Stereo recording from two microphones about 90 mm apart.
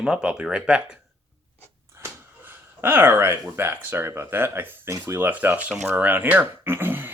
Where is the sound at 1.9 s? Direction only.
30° right (ahead or behind).